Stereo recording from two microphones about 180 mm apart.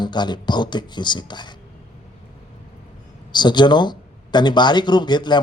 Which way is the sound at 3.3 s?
25° left (ahead or behind).